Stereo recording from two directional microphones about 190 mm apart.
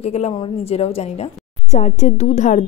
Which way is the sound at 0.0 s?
35° left (ahead or behind).